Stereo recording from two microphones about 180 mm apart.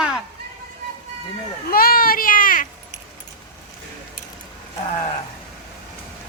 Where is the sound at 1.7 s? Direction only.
55° left (ahead or behind).